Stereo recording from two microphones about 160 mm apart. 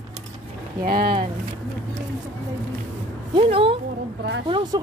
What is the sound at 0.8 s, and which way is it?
Speech, 70° right (ahead or behind).